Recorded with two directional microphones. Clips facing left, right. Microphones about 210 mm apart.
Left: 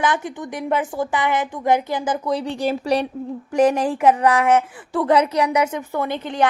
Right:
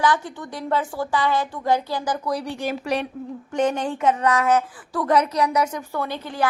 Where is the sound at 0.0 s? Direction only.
20° left (ahead or behind).